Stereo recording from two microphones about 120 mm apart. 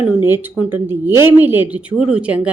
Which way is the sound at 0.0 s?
20° right (ahead or behind).